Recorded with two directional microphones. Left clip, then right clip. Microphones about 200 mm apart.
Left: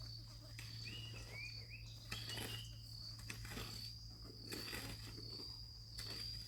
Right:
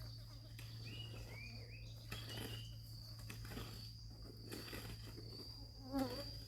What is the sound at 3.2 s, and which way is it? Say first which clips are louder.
Cricket: left 1 dB; 25° left (ahead or behind).